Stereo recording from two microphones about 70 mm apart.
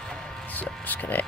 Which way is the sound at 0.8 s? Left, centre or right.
Left.